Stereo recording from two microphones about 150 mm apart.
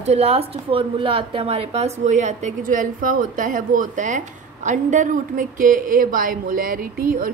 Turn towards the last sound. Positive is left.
turn(degrees=-75)  # may be behind; listen again after turning